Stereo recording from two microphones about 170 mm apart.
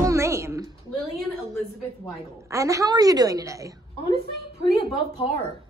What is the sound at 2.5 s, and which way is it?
A woman's voice, 20° right (ahead or behind).